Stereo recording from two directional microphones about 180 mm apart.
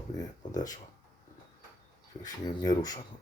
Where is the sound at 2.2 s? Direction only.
20° left (ahead or behind).